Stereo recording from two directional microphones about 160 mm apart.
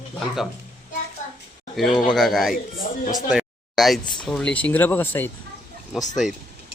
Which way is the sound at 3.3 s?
Centre (ahead or behind).